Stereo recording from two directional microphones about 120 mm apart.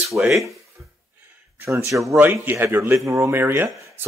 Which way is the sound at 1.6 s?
25° right (ahead or behind).